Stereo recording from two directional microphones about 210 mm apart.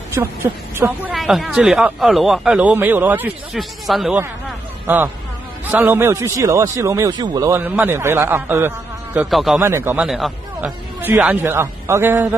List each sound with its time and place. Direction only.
0.1 s speech: 10° right (ahead or behind)
1.1 s speech: centre (ahead or behind)
9.6 s speech: 15° right (ahead or behind)